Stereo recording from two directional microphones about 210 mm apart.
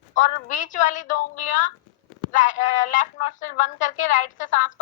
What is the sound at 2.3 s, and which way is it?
Speech, 40° left (ahead or behind).